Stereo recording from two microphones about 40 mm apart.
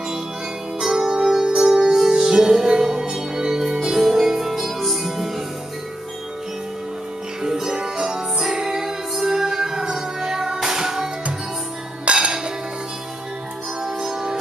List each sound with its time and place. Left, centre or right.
0.7 s music: centre
7.4 s music: centre
12.0 s dishes: right
13.8 s music: centre